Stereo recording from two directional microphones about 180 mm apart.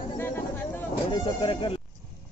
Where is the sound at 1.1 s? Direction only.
30° left (ahead or behind).